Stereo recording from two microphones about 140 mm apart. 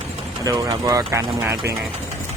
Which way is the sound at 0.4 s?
25° right (ahead or behind).